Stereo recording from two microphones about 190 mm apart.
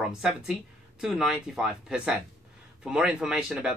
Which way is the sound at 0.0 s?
5° right (ahead or behind).